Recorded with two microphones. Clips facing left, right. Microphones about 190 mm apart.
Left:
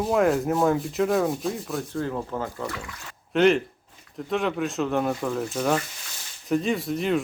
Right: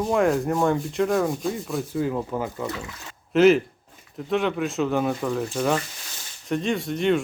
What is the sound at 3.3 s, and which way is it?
Sanding, 5° right (ahead or behind).